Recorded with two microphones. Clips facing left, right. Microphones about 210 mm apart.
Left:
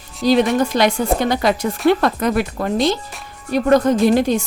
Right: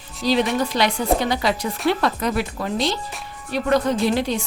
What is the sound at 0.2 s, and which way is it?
A woman's voice, 50° left (ahead or behind).